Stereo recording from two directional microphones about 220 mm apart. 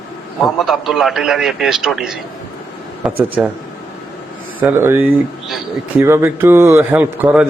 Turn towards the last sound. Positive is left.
turn(degrees=-5)  # may be behind; listen again after turning